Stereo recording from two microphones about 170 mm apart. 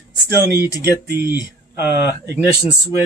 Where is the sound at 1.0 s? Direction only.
70° right (ahead or behind).